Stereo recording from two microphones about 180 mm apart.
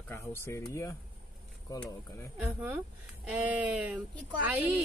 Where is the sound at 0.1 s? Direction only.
15° left (ahead or behind).